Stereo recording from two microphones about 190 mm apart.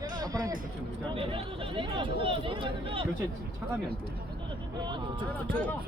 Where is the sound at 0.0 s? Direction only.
20° right (ahead or behind).